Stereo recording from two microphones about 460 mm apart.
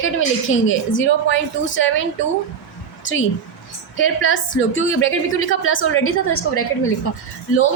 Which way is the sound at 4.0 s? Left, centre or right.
Left.